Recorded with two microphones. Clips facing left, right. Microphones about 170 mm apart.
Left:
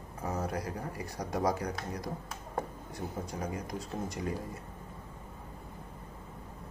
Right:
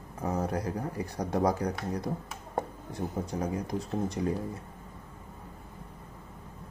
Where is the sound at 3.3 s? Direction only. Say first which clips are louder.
Right 5 dB; 30° right (ahead or behind).